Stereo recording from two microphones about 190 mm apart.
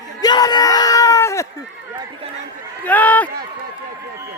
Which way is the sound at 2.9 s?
10° left (ahead or behind).